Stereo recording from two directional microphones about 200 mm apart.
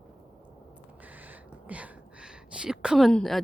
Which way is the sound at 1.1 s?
10° right (ahead or behind).